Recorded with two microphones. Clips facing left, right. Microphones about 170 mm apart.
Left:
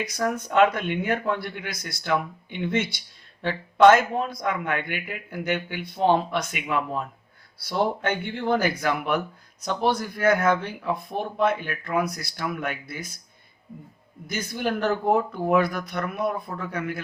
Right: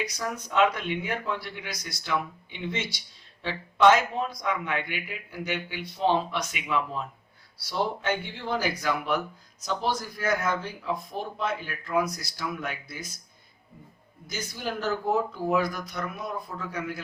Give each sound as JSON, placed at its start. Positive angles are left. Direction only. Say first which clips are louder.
{"t": 0.0, "sound": "a man's voice", "louder": "left 6 dB", "side_deg": 50}
{"t": 14.3, "sound": "speech", "louder": "left 6 dB", "side_deg": 60}